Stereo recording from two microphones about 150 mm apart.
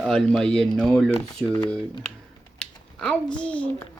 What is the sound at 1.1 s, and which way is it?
Speech, 30° left (ahead or behind).